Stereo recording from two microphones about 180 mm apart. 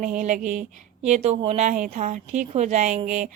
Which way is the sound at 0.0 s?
45° right (ahead or behind).